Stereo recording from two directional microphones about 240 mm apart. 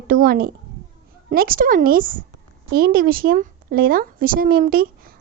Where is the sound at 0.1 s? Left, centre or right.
Right.